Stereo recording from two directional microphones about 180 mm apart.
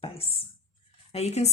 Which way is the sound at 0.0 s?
30° left (ahead or behind).